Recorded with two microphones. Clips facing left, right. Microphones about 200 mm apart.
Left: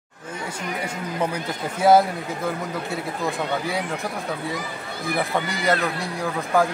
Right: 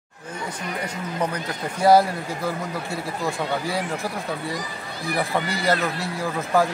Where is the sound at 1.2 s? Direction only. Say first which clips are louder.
Left 1 dB; 5° left (ahead or behind).